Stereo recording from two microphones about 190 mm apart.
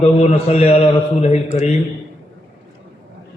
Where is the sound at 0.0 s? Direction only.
35° left (ahead or behind).